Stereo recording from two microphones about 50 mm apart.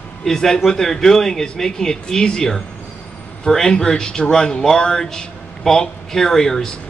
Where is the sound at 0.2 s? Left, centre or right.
Centre.